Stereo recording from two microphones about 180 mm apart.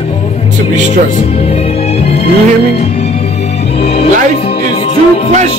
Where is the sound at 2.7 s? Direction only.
35° left (ahead or behind).